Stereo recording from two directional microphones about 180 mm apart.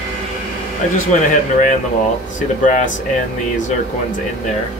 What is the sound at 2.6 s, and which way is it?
Speech, 45° left (ahead or behind).